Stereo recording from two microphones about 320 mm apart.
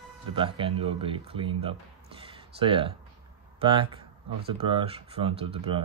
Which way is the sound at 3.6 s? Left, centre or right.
Centre.